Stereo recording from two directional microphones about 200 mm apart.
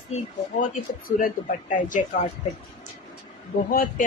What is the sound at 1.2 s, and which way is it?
Speech, 40° left (ahead or behind).